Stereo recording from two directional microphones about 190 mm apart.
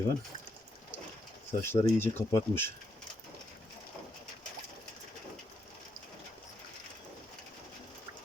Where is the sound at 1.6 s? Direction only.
10° left (ahead or behind).